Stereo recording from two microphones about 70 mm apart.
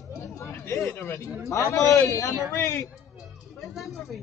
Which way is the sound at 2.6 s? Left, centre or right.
Left.